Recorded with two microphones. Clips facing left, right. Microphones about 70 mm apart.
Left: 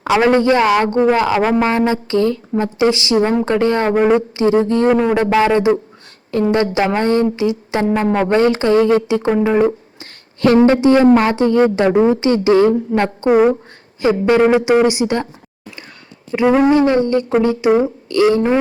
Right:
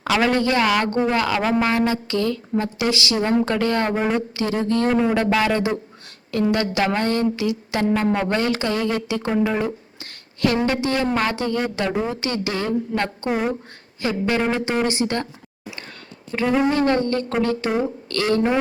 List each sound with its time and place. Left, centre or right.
0.0 s a woman's voice: left
16.3 s speech: centre